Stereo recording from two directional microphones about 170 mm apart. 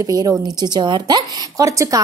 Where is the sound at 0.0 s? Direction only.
20° right (ahead or behind).